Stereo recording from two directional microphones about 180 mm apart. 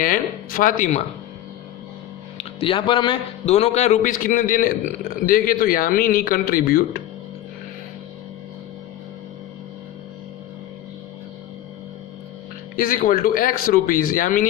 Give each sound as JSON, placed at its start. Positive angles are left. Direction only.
{"t": 0.0, "sound": "a man's voice", "side_deg": 50}
{"t": 2.4, "sound": "a man's voice", "side_deg": 30}
{"t": 12.7, "sound": "a man's voice", "side_deg": 50}